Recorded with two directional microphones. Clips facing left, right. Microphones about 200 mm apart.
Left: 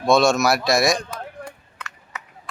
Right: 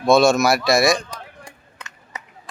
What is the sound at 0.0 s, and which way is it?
Speech, centre (ahead or behind).